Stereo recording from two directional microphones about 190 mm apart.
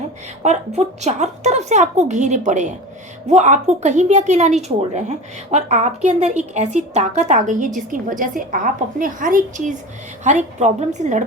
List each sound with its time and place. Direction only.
0.4 s a woman's voice: 35° right (ahead or behind)